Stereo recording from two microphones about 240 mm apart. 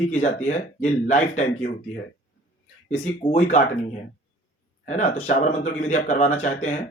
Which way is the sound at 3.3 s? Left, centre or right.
Left.